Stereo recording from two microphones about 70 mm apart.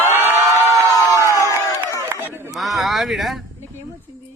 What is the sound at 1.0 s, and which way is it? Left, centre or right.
Crowd, right.